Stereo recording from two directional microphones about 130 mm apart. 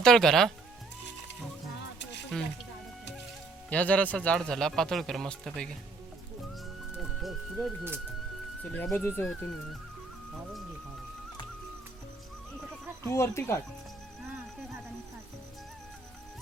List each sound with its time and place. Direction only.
0.0 s speech: 5° left (ahead or behind)
2.3 s speech: centre (ahead or behind)
3.7 s speech: 10° left (ahead or behind)
6.9 s music: centre (ahead or behind)
8.7 s speech: 15° left (ahead or behind)
13.1 s speech: 20° left (ahead or behind)